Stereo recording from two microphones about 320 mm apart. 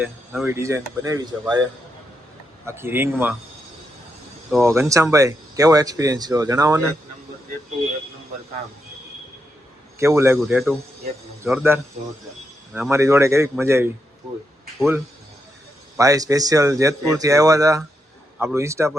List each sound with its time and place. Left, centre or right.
0.0 s speech: centre
2.6 s speech: centre
4.5 s speech: centre
10.0 s a man's voice: centre